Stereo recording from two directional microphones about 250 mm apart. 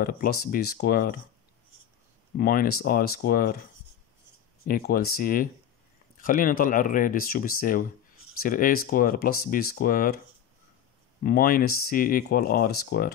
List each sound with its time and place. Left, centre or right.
0.0 s speech: left
2.3 s speech: left
4.6 s speech: left
11.2 s speech: left